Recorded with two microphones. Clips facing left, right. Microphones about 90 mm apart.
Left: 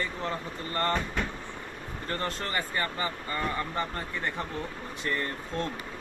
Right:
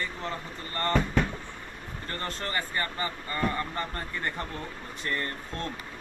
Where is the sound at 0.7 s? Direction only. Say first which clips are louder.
Left 1 dB; 20° left (ahead or behind).